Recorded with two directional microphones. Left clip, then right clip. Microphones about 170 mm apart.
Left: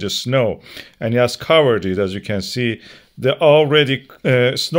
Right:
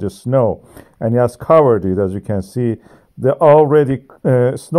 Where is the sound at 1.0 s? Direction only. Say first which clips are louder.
Right 2 dB; 25° left (ahead or behind).